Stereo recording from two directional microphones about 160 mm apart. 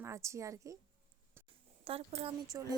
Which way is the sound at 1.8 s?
35° right (ahead or behind).